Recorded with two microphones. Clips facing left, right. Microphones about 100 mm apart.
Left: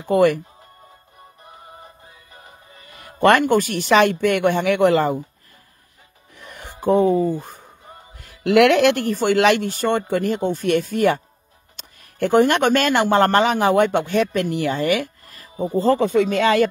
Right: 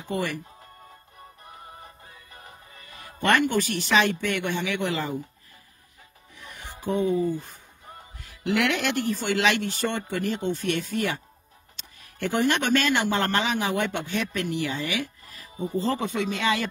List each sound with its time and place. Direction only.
0.1 s speech: 65° left (ahead or behind)
3.2 s speech: 50° left (ahead or behind)
6.3 s music: 55° left (ahead or behind)
7.2 s speech: 45° left (ahead or behind)
8.2 s speech: 60° left (ahead or behind)